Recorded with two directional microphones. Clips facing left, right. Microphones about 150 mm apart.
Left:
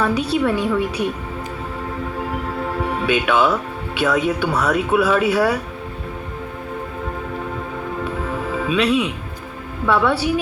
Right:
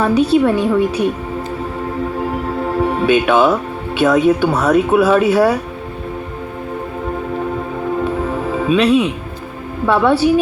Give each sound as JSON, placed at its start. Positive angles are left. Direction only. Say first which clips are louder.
{"t": 0.0, "sound": "speech", "louder": "right 6 dB", "side_deg": -30}
{"t": 2.6, "sound": "speech", "louder": "right 7 dB", "side_deg": -35}
{"t": 8.2, "sound": "music", "louder": "right 5 dB", "side_deg": -35}
{"t": 9.8, "sound": "speech", "louder": "right 5 dB", "side_deg": -30}